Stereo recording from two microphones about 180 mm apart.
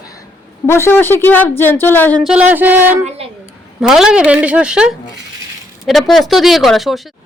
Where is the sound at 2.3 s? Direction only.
10° right (ahead or behind).